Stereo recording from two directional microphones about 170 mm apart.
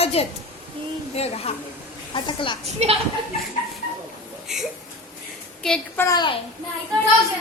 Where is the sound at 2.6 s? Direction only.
40° right (ahead or behind).